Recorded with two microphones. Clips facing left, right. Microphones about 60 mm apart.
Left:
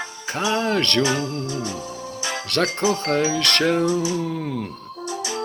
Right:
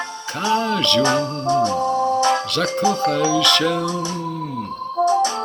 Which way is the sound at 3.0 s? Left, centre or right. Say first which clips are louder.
Right 3 dB; left.